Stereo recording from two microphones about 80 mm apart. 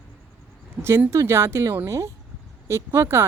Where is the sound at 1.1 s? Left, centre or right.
Right.